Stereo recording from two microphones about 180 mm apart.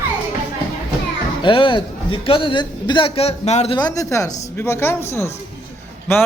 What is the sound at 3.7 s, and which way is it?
A man's voice, 20° left (ahead or behind).